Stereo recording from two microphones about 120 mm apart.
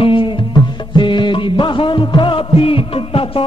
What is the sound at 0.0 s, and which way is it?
Music, 45° left (ahead or behind).